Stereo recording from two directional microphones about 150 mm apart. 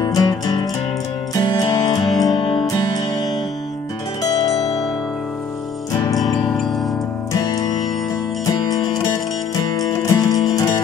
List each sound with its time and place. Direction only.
0.0 s music: 25° left (ahead or behind)
2.0 s music: centre (ahead or behind)
2.3 s music: 35° left (ahead or behind)
2.6 s music: 25° left (ahead or behind)
6.4 s music: centre (ahead or behind)
7.3 s music: 25° left (ahead or behind)